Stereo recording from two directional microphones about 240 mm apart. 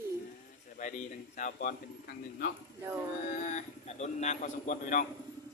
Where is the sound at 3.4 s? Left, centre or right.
Left.